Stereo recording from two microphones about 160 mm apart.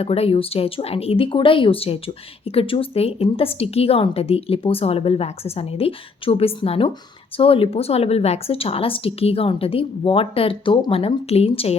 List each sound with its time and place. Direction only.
0.0 s speech: 40° left (ahead or behind)